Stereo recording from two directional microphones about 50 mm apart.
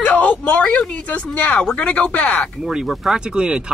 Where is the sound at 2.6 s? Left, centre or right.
Centre.